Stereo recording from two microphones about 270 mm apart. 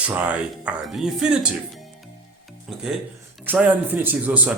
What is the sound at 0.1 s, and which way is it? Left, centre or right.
Speech, centre.